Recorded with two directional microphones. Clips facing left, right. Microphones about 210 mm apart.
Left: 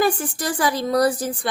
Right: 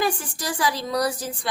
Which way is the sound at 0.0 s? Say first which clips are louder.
Left 5 dB; 55° left (ahead or behind).